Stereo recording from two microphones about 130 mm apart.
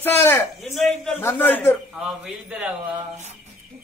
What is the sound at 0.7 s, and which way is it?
Choir, 5° left (ahead or behind).